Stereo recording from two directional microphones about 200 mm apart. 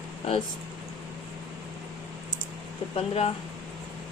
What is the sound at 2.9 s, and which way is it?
Speech, 30° left (ahead or behind).